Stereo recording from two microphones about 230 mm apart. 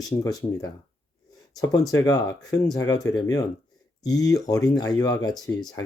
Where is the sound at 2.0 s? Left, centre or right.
Centre.